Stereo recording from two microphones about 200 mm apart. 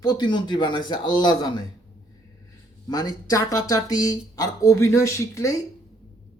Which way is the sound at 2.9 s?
20° left (ahead or behind).